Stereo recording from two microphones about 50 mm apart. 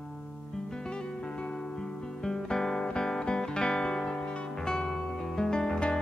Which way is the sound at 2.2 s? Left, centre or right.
Centre.